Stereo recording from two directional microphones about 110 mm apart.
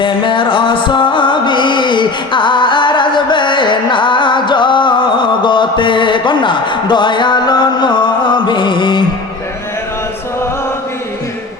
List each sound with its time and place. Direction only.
0.0 s music: 50° left (ahead or behind)